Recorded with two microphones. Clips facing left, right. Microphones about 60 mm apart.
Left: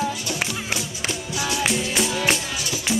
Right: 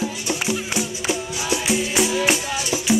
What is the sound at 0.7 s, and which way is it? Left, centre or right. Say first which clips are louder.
Music: right 4 dB; right.